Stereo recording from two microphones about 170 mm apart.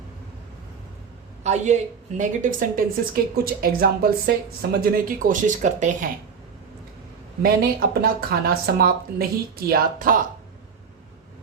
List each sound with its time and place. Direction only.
1.5 s a woman's voice: 45° right (ahead or behind)
7.4 s a woman's voice: 65° right (ahead or behind)